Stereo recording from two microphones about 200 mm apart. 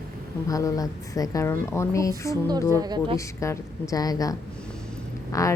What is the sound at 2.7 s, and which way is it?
Speech, 20° right (ahead or behind).